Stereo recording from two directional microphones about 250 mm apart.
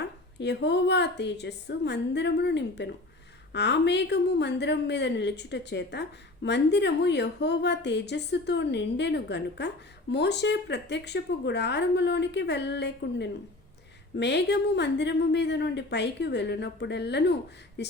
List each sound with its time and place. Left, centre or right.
0.0 s a woman's voice: left